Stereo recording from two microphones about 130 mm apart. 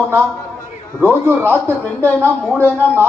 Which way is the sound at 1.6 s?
15° left (ahead or behind).